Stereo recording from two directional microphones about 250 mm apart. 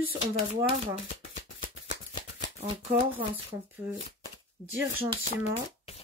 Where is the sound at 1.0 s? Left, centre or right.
Left.